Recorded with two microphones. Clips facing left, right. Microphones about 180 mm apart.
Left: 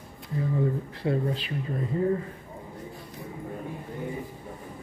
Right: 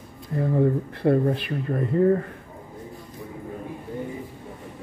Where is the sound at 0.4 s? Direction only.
55° right (ahead or behind).